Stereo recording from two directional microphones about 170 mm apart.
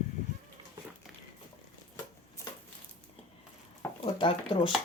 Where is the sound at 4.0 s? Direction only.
30° left (ahead or behind).